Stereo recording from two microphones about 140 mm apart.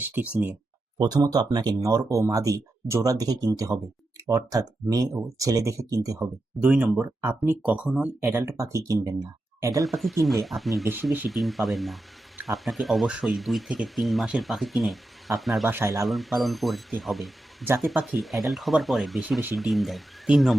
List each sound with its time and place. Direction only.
0.0 s speech: 15° right (ahead or behind)
0.9 s speech: 30° right (ahead or behind)
6.6 s speech: 10° right (ahead or behind)
9.8 s speech: centre (ahead or behind)